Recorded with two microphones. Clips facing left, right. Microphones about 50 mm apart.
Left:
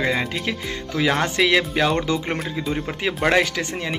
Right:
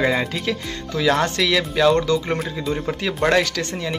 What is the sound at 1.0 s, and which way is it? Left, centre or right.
Speech, left.